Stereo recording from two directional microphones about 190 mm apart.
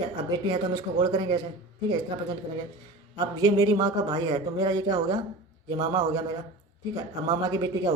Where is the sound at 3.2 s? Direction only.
20° right (ahead or behind).